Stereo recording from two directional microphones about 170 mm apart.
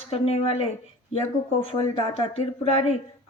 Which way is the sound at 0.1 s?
35° left (ahead or behind).